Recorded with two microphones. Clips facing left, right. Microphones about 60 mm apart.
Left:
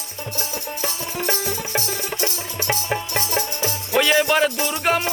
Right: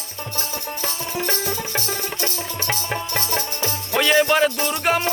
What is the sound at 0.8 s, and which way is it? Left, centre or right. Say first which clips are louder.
Music: even; centre.